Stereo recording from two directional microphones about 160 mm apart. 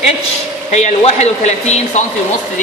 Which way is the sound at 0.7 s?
45° left (ahead or behind).